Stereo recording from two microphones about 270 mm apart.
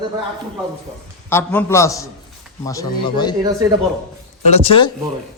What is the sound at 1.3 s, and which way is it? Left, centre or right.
A man's voice, centre.